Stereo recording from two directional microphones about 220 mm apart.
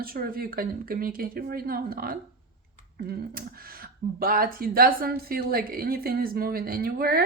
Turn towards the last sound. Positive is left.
turn(degrees=-45)  # may be behind; listen again after turning